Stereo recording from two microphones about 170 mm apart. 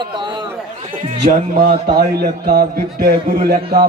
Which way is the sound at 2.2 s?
60° right (ahead or behind).